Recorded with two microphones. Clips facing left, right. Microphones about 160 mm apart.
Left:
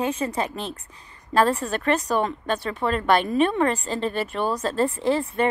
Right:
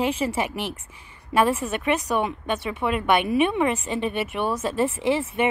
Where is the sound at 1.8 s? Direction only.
20° right (ahead or behind).